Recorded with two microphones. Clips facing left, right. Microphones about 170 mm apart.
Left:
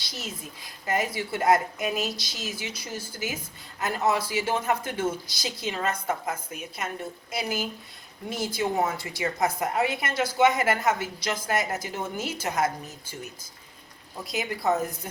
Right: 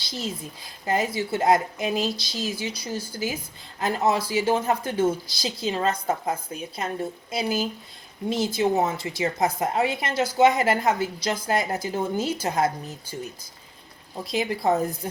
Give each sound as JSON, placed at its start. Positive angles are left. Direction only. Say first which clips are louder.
{"t": 0.0, "sound": "speech", "louder": "right 6 dB", "side_deg": -30}
{"t": 14.3, "sound": "speech", "louder": "right 3 dB", "side_deg": -30}